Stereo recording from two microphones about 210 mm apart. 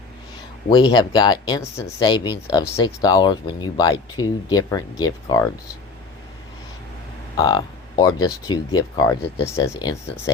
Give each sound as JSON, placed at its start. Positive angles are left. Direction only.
{"t": 0.7, "sound": "speech", "side_deg": 20}
{"t": 7.3, "sound": "speech", "side_deg": 20}